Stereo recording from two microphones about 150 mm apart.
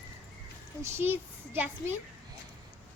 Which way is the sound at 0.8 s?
15° right (ahead or behind).